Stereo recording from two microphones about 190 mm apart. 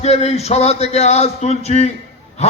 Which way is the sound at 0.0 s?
35° left (ahead or behind).